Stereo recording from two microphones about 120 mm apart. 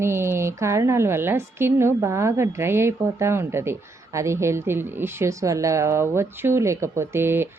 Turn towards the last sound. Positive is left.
turn(degrees=-20)  # may be behind; listen again after turning